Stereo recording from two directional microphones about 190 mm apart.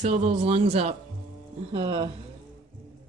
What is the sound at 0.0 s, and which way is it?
A woman's voice, 35° right (ahead or behind).